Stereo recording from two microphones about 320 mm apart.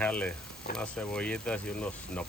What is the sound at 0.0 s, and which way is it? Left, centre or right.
Speech, centre.